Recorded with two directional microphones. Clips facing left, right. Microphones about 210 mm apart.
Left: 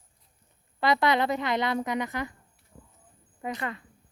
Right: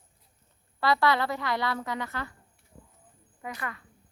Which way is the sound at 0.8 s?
20° left (ahead or behind).